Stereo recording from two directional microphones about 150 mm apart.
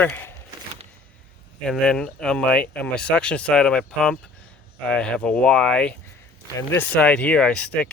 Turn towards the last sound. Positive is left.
turn(degrees=5)  # may be behind; listen again after turning